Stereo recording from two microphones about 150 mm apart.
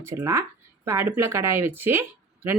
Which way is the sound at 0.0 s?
15° right (ahead or behind).